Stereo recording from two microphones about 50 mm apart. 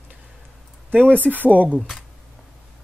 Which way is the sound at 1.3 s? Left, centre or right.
Right.